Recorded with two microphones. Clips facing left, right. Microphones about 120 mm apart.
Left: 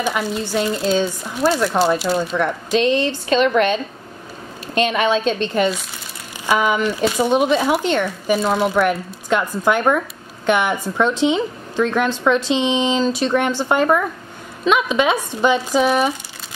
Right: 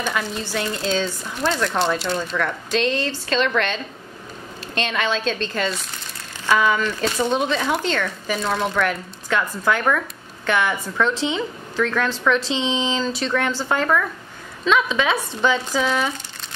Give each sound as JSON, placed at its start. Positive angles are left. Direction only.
{"t": 0.0, "sound": "speech", "side_deg": 10}
{"t": 5.1, "sound": "a woman's voice", "side_deg": 20}